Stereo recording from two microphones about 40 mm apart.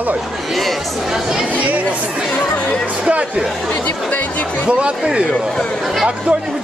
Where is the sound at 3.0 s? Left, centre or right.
Right.